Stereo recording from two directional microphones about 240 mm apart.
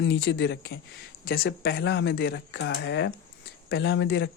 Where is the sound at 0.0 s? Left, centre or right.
Left.